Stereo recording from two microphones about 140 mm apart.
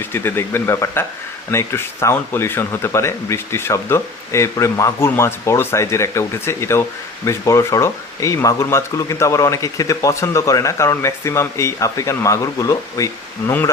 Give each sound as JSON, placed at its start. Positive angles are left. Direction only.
{"t": 0.0, "sound": "speech", "side_deg": 15}